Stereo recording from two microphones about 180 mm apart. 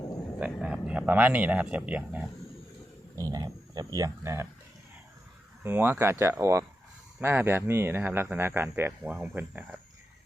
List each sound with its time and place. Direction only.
0.3 s speech: 5° right (ahead or behind)
3.2 s speech: 20° right (ahead or behind)
5.6 s speech: 10° right (ahead or behind)